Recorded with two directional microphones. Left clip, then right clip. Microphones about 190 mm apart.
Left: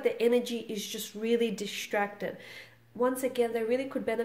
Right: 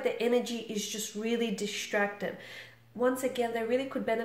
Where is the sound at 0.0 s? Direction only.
45° left (ahead or behind).